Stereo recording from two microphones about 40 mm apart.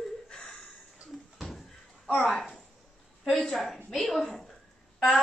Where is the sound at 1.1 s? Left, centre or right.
Centre.